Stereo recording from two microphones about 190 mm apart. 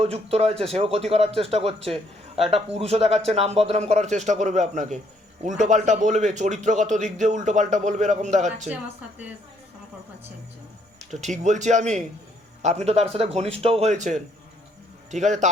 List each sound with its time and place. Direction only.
0.0 s a man's voice: 35° right (ahead or behind)
8.6 s speech: 5° right (ahead or behind)
11.1 s a man's voice: 40° right (ahead or behind)